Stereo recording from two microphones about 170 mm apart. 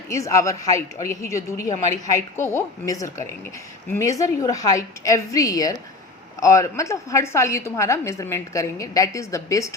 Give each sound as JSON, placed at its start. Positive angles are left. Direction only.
{"t": 0.1, "sound": "a woman's voice", "side_deg": 20}